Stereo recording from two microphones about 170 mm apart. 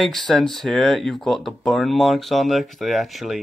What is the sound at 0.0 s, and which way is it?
Speech, centre (ahead or behind).